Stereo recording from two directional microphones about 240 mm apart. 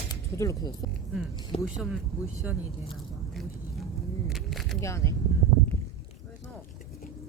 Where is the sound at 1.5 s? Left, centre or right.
Left.